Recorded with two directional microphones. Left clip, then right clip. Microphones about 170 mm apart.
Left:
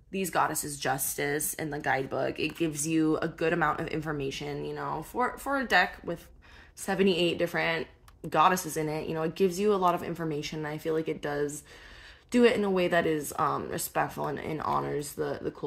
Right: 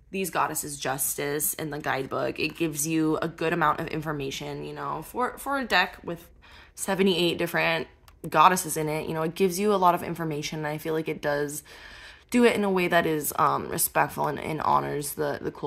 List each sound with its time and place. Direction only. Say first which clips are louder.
0.1 s speech: right 1 dB; 10° right (ahead or behind)
6.9 s speech: right 2 dB; 35° right (ahead or behind)